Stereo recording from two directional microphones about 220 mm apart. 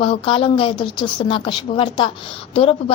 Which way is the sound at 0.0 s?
25° left (ahead or behind).